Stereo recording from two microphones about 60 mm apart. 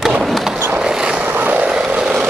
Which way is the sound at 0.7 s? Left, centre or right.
Centre.